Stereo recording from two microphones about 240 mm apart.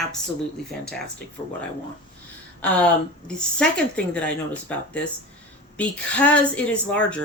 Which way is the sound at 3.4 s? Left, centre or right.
Centre.